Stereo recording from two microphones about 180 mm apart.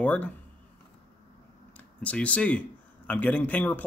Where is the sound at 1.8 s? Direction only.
5° left (ahead or behind).